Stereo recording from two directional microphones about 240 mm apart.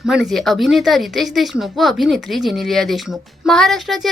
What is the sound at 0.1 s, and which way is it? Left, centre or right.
Speech, centre.